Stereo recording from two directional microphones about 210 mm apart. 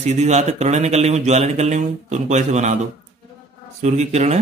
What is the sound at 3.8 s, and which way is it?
Speech, 35° right (ahead or behind).